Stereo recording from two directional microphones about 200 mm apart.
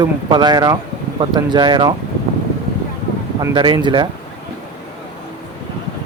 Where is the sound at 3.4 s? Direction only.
20° right (ahead or behind).